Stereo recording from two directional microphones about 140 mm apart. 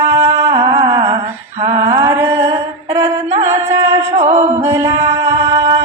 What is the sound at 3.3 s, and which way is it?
Music, 55° right (ahead or behind).